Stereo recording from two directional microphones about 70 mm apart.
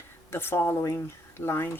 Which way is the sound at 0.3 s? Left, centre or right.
Left.